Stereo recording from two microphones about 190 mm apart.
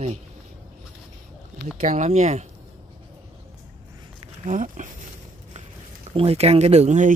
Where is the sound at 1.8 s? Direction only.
40° right (ahead or behind).